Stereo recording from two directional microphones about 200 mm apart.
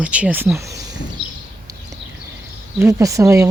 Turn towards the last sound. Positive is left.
turn(degrees=-15)  # may be behind; listen again after turning